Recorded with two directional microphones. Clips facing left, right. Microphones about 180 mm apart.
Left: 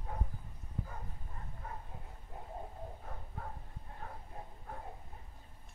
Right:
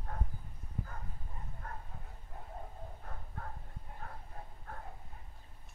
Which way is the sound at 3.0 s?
5° left (ahead or behind).